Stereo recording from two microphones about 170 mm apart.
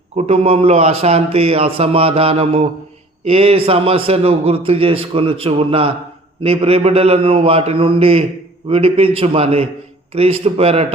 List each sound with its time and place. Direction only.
0.2 s a man's voice: 40° right (ahead or behind)